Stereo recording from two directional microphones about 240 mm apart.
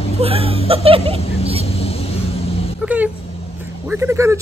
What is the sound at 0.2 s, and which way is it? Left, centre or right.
Speech, right.